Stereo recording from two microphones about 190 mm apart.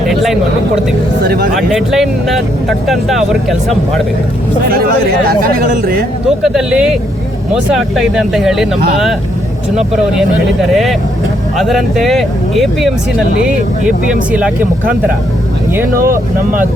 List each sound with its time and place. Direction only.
0.1 s a sound: centre (ahead or behind)
1.2 s a sound: 55° right (ahead or behind)
1.5 s speech: centre (ahead or behind)
5.3 s speech: 50° right (ahead or behind)
6.2 s speech: 5° right (ahead or behind)
10.7 s speech: centre (ahead or behind)
14.3 s speech: 10° right (ahead or behind)